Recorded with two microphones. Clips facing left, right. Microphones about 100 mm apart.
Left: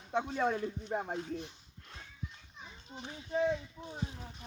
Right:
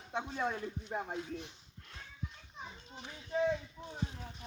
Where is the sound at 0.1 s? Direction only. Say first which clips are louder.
Left 4 dB; 45° left (ahead or behind).